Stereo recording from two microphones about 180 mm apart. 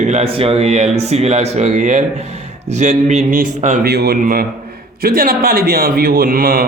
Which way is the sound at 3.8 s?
60° right (ahead or behind).